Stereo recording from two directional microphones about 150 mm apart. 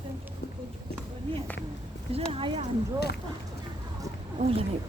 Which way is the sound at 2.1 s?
40° right (ahead or behind).